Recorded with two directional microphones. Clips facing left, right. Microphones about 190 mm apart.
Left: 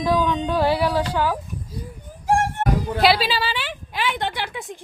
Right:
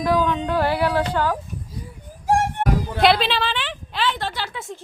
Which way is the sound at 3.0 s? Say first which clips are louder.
Right 1 dB; 5° left (ahead or behind).